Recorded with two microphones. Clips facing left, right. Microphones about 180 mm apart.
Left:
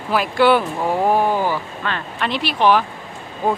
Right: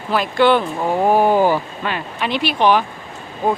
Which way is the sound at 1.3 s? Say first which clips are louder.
Right 5 dB; 15° right (ahead or behind).